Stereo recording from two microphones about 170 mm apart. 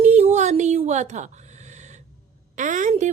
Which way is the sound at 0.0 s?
40° right (ahead or behind).